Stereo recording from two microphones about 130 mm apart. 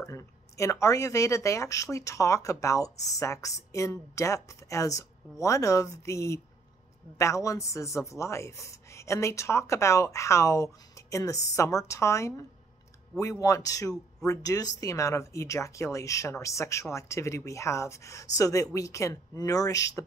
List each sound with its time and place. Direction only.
0.0 s speech: 25° left (ahead or behind)